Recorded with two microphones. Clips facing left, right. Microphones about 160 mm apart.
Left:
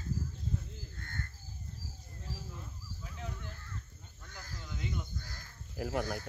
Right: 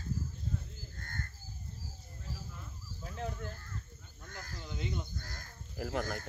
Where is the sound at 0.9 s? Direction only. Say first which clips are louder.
Even; 40° right (ahead or behind).